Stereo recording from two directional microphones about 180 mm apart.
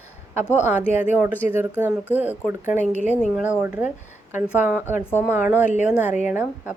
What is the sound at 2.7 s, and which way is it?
Speech, 40° left (ahead or behind).